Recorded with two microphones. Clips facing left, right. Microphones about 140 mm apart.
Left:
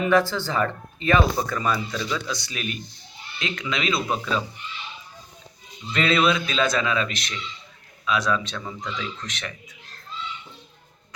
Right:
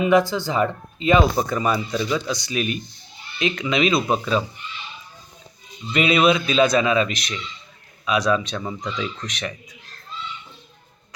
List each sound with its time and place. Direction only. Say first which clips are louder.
0.0 s speech: right 3 dB; 15° right (ahead or behind)
5.9 s speech: right 3 dB; 15° right (ahead or behind)